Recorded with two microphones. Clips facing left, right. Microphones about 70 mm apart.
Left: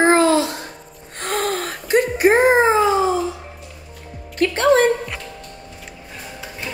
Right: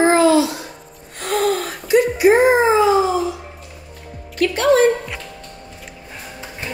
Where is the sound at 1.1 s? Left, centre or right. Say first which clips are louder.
Right 3 dB; left.